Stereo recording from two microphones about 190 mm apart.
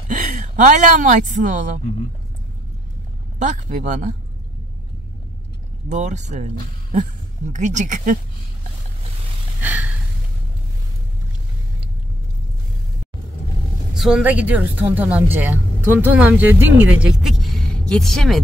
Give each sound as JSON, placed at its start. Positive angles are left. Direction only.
{"t": 0.1, "sound": "speech", "side_deg": -40}
{"t": 3.3, "sound": "speech", "side_deg": -40}
{"t": 5.9, "sound": "speech", "side_deg": -40}
{"t": 9.6, "sound": "a sound", "side_deg": -10}
{"t": 13.9, "sound": "a woman's voice", "side_deg": 0}